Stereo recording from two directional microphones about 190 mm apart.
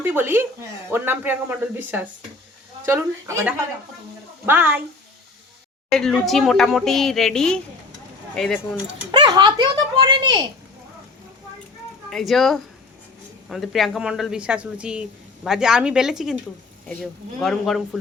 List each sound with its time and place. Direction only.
0.0 s speech: 10° right (ahead or behind)
5.9 s speech: centre (ahead or behind)
9.1 s speech: 20° right (ahead or behind)
12.1 s speech: centre (ahead or behind)